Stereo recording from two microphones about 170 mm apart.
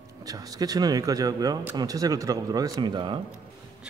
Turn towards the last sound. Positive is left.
turn(degrees=-25)  # may be behind; listen again after turning